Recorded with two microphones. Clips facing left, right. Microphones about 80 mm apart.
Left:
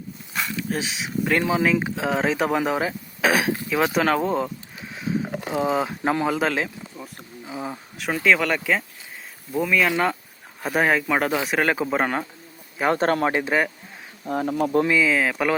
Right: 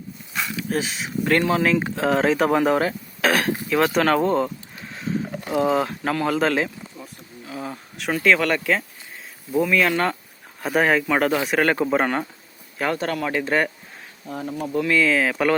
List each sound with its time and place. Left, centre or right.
0.3 s speech: centre
5.2 s a sound: left
6.0 s speech: centre
6.3 s a sound: centre
7.4 s a sound: centre
7.9 s speech: centre
12.9 s speech: left
13.4 s speech: centre
14.3 s speech: left
14.8 s speech: centre